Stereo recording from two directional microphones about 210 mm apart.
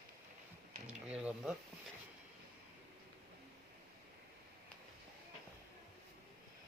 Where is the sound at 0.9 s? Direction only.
5° right (ahead or behind).